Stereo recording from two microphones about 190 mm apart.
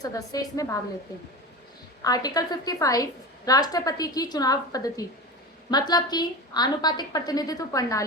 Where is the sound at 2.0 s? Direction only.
20° left (ahead or behind).